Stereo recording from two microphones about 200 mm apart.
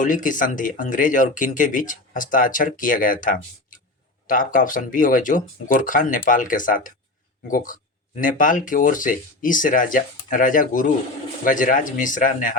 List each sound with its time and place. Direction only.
0.0 s speech: 40° left (ahead or behind)